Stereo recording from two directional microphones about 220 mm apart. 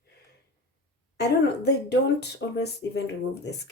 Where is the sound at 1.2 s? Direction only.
50° left (ahead or behind).